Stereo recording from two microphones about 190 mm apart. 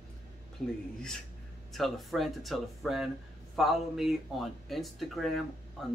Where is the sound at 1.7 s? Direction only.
Centre (ahead or behind).